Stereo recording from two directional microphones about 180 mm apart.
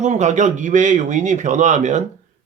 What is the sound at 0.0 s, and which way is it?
Speech, 40° right (ahead or behind).